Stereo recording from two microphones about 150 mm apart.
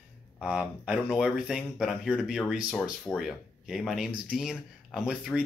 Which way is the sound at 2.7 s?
10° left (ahead or behind).